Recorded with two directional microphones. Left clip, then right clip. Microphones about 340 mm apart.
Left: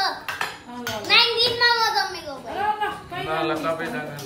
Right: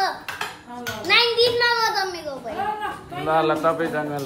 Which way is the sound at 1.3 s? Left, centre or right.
Centre.